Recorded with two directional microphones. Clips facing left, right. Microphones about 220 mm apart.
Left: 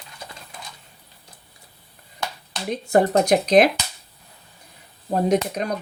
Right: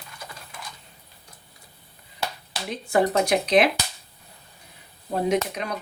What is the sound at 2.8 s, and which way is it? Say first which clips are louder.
Speech: left 4 dB; 40° left (ahead or behind).